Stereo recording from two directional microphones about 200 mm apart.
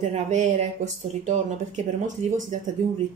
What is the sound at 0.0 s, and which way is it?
Speech, 35° right (ahead or behind).